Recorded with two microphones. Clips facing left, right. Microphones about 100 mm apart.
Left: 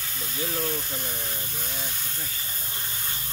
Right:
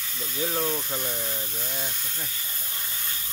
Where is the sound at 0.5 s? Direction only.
30° right (ahead or behind).